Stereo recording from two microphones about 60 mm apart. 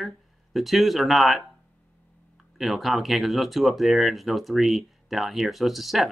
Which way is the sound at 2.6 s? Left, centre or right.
Centre.